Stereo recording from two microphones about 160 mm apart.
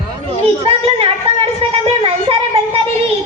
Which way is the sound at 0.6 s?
35° right (ahead or behind).